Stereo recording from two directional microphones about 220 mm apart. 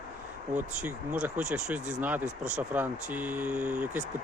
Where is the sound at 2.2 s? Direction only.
35° right (ahead or behind).